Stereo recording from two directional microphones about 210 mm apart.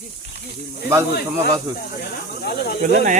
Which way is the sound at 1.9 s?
45° left (ahead or behind).